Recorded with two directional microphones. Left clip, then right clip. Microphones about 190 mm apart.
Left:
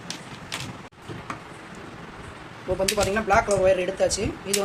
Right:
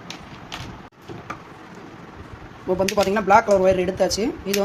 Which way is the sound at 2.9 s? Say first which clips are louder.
Right 6 dB; 55° right (ahead or behind).